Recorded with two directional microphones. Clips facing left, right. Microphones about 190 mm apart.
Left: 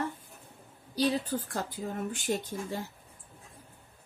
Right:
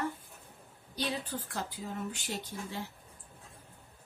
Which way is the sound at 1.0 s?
45° left (ahead or behind).